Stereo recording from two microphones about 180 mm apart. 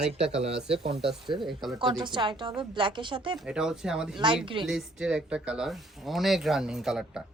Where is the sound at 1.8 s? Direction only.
25° right (ahead or behind).